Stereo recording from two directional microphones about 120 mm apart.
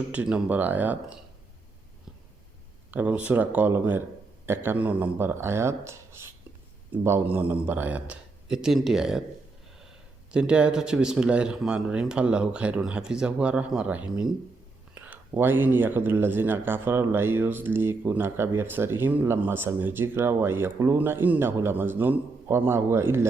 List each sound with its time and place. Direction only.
0.1 s speech: 10° right (ahead or behind)
2.9 s speech: 10° right (ahead or behind)
10.3 s speech: 10° right (ahead or behind)